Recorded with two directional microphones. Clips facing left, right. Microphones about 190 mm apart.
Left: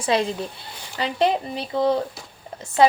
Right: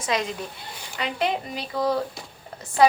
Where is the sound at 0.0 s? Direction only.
30° left (ahead or behind).